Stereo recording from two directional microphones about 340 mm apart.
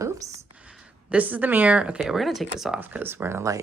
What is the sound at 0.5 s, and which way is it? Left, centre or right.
Speech, centre.